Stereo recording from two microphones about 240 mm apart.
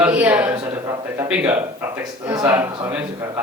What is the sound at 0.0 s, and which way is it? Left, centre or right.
A woman's voice, centre.